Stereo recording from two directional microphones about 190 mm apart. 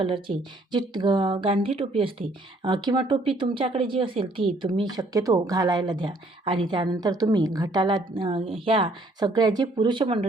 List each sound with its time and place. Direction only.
0.0 s speech: 25° right (ahead or behind)